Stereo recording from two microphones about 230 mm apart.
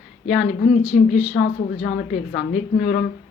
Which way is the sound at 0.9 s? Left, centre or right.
Left.